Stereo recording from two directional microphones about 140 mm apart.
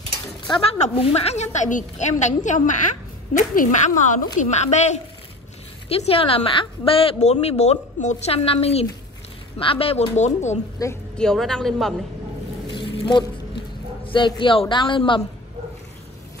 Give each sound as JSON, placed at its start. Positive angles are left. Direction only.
{"t": 0.5, "sound": "a woman's voice", "side_deg": 45}
{"t": 4.4, "sound": "a woman's voice", "side_deg": 55}
{"t": 10.8, "sound": "a woman's voice", "side_deg": 25}
{"t": 11.1, "sound": "a woman's voice", "side_deg": 5}
{"t": 12.7, "sound": "a sound", "side_deg": 35}
{"t": 14.0, "sound": "a woman's voice", "side_deg": 35}